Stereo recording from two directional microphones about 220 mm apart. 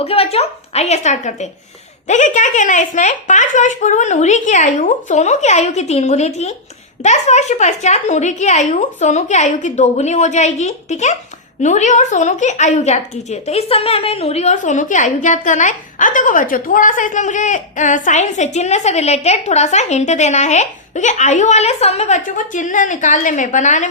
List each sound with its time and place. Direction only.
0.0 s a woman's voice: 25° left (ahead or behind)